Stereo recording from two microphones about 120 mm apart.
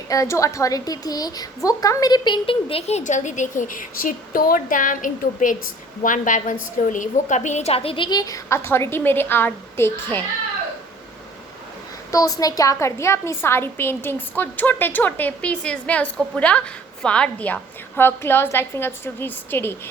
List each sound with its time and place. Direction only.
0.1 s a woman's voice: 25° left (ahead or behind)
12.1 s a woman's voice: 30° left (ahead or behind)